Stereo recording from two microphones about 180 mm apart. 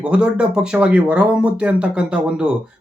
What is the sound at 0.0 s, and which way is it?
A man's voice, 5° right (ahead or behind).